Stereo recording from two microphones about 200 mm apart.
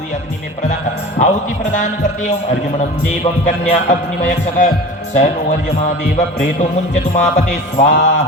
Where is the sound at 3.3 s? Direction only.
25° left (ahead or behind).